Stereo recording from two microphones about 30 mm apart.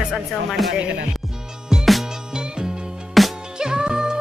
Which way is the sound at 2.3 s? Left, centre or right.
Right.